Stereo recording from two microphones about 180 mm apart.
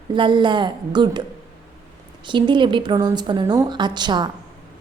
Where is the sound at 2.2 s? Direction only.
25° right (ahead or behind).